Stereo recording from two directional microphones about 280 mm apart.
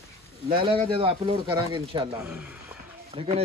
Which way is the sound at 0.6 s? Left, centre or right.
Centre.